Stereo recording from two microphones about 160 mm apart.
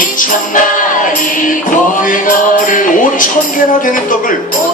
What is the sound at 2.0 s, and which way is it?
Music, 55° left (ahead or behind).